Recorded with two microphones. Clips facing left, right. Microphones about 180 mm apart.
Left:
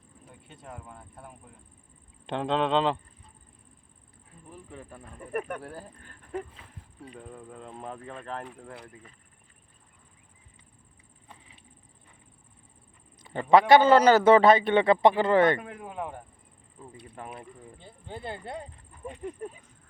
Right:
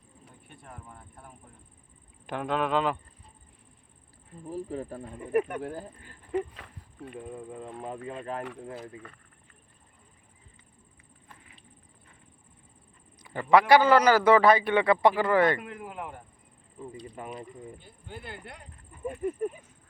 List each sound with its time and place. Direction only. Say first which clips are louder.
2.2 s a man's voice: left 2 dB; 25° left (ahead or behind)
4.4 s speech: right 11 dB; 35° right (ahead or behind)
5.3 s speech: right 6 dB; 10° right (ahead or behind)
6.3 s speech: right 5 dB; 75° right (ahead or behind)
7.2 s speech: right 5 dB; 5° right (ahead or behind)
13.2 s a man's voice: left 1 dB; 25° left (ahead or behind)
17.7 s a man's voice: left 3 dB; 25° left (ahead or behind)
19.0 s speech: right 6 dB; 5° right (ahead or behind)